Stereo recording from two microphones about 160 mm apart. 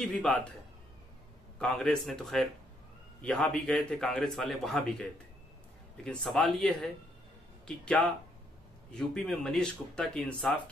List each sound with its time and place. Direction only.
0.0 s a man's voice: 5° left (ahead or behind)
1.6 s a man's voice: 5° left (ahead or behind)